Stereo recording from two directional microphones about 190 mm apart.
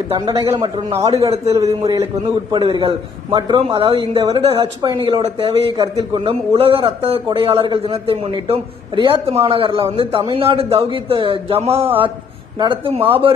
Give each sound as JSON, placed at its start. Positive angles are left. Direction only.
{"t": 0.2, "sound": "a man's voice", "side_deg": -25}
{"t": 1.8, "sound": "a man's voice", "side_deg": -15}